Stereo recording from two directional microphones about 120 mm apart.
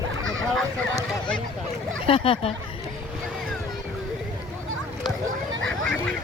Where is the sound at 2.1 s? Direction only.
50° left (ahead or behind).